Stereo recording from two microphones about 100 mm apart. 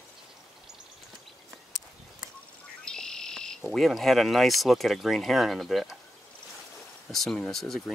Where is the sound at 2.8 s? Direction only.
5° left (ahead or behind).